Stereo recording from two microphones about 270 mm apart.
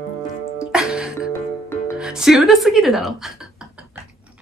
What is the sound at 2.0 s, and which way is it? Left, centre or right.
Speech, centre.